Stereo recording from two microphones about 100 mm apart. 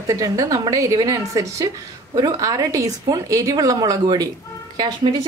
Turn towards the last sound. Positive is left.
turn(degrees=-45)  # may be behind; listen again after turning